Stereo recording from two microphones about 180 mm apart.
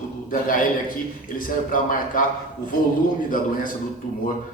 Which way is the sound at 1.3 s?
50° left (ahead or behind).